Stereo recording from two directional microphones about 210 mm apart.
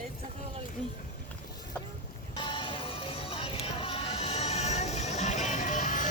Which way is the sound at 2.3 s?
25° left (ahead or behind).